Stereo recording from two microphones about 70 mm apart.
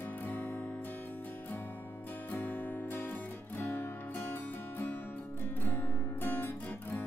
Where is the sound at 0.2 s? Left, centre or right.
Left.